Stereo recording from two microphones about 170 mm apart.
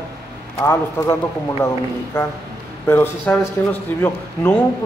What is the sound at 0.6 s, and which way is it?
Speech, 15° left (ahead or behind).